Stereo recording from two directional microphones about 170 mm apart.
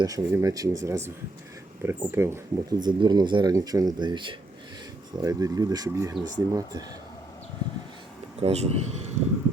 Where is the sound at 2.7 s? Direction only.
25° right (ahead or behind).